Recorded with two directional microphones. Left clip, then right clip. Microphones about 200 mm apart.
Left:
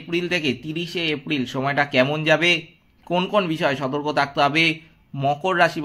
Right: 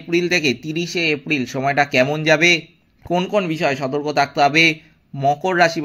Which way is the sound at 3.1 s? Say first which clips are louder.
Right 2 dB; centre (ahead or behind).